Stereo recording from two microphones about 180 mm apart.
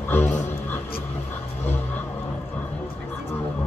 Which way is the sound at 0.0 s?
10° left (ahead or behind).